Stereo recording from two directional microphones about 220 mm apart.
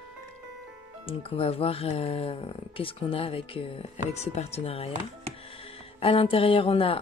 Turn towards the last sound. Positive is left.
turn(degrees=25)  # may be behind; listen again after turning